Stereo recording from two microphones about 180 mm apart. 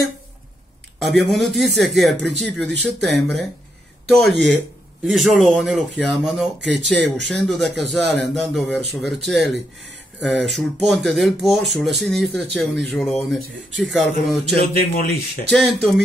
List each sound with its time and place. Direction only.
1.3 s speech: centre (ahead or behind)
4.1 s speech: 5° left (ahead or behind)
14.7 s speech: 55° left (ahead or behind)
15.5 s speech: centre (ahead or behind)